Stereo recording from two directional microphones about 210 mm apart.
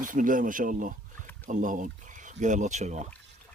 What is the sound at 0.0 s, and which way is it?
Speech, 40° right (ahead or behind).